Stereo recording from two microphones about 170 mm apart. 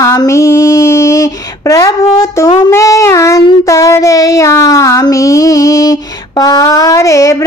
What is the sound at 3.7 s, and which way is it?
Speech, 20° left (ahead or behind).